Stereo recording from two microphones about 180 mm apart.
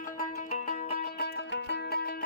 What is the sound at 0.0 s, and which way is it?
Music, 45° left (ahead or behind).